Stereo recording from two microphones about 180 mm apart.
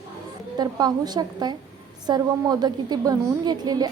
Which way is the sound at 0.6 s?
20° right (ahead or behind).